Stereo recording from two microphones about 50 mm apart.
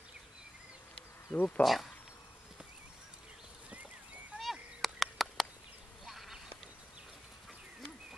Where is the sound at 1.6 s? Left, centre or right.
Centre.